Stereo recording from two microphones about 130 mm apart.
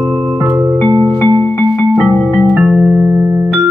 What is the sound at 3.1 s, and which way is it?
Music, 20° right (ahead or behind).